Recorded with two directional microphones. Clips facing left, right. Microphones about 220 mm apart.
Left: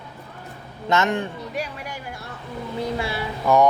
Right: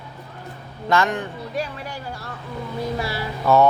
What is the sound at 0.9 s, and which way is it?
Speech, 25° left (ahead or behind).